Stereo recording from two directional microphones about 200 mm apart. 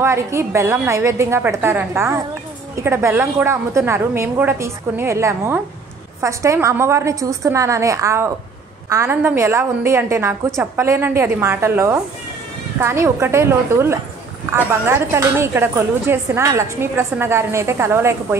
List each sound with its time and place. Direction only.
0.0 s a woman's voice: 15° right (ahead or behind)